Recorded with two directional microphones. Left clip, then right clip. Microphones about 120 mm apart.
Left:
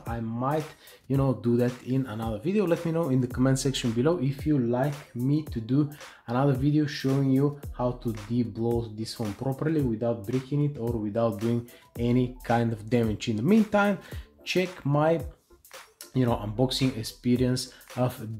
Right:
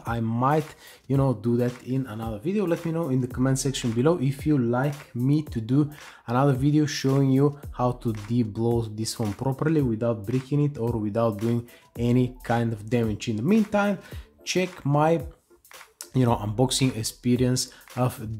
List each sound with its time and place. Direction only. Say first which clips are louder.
0.0 s speech: right 6 dB; 55° right (ahead or behind)
1.0 s speech: right 2 dB; 30° right (ahead or behind)
1.4 s speech: even; 15° right (ahead or behind)
1.7 s speech: even; centre (ahead or behind)
4.0 s speech: right 4 dB; 40° right (ahead or behind)
6.2 s speech: right 3 dB; 35° right (ahead or behind); by 10.9 s 50° right (ahead or behind)
11.1 s speech: right 1 dB; 30° right (ahead or behind)
12.5 s speech: left 1 dB; 15° right (ahead or behind)
14.4 s speech: right 1 dB; 20° right (ahead or behind)
14.9 s speech: right 3 dB; 30° right (ahead or behind)